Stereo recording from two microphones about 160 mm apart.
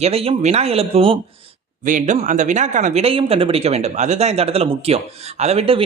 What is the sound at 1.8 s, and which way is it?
Speech, 50° right (ahead or behind).